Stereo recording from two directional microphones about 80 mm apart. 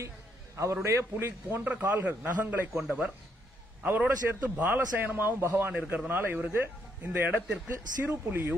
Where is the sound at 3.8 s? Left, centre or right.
Right.